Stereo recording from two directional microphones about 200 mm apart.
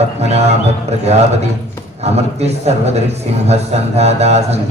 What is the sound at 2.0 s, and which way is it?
A man's voice, 30° right (ahead or behind).